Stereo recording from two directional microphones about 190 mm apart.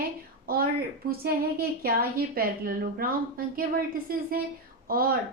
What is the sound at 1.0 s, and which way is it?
A woman's voice, 50° right (ahead or behind).